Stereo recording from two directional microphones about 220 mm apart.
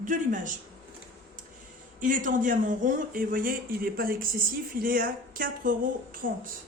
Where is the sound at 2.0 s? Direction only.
35° right (ahead or behind).